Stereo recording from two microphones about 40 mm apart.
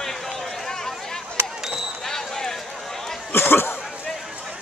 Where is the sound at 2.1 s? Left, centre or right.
Centre.